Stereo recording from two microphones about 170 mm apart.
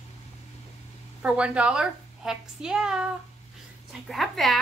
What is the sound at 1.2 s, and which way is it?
A woman's voice, 5° right (ahead or behind).